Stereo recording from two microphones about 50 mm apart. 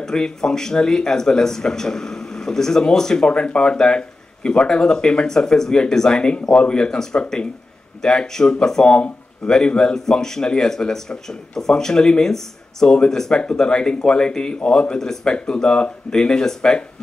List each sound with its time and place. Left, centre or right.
0.0 s speech: centre